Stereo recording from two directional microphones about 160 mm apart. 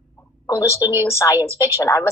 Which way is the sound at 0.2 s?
20° left (ahead or behind).